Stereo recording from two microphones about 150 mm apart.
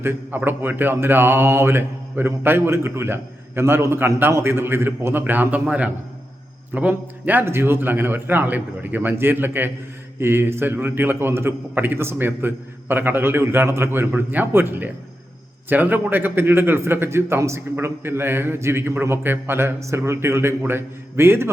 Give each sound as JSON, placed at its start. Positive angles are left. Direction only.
{"t": 0.0, "sound": "speech", "side_deg": -15}